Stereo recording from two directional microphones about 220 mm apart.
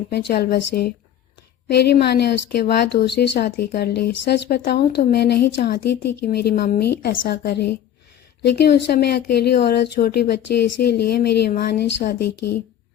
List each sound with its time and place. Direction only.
0.1 s speech: 50° left (ahead or behind)